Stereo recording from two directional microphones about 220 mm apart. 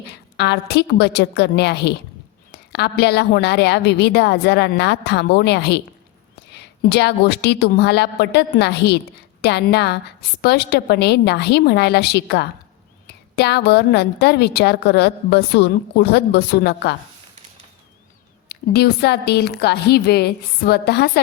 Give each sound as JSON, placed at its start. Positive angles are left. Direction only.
{"t": 0.3, "sound": "a woman's voice", "side_deg": 50}
{"t": 18.4, "sound": "a woman's voice", "side_deg": 45}